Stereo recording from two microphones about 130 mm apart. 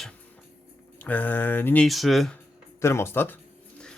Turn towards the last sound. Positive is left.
turn(degrees=15)  # may be behind; listen again after turning